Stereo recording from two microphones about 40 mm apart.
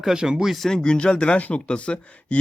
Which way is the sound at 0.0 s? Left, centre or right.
Centre.